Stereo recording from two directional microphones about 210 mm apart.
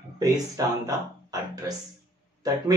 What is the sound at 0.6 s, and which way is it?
Speech, 15° right (ahead or behind).